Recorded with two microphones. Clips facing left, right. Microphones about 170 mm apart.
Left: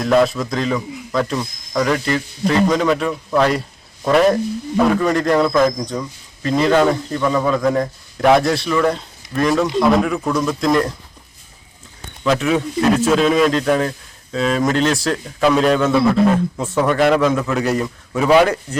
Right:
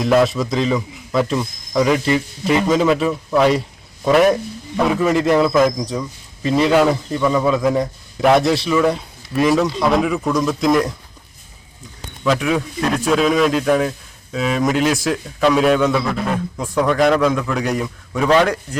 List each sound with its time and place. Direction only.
0.0 s a man's voice: centre (ahead or behind)
12.2 s a man's voice: centre (ahead or behind)